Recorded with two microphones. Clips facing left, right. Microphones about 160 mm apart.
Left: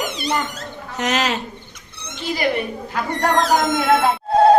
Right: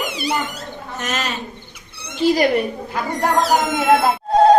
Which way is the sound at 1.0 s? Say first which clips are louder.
Left 5 dB; 80° left.